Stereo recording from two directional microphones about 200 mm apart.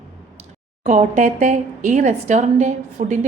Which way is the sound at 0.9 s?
35° right (ahead or behind).